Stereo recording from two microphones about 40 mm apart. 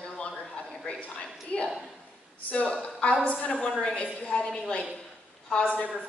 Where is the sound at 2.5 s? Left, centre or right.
Left.